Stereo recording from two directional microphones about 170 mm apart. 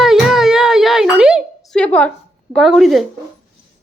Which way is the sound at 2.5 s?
Centre (ahead or behind).